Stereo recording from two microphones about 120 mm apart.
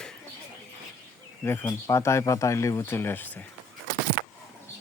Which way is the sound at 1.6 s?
25° left (ahead or behind).